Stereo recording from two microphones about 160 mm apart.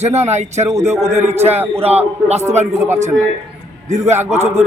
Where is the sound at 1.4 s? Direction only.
40° right (ahead or behind).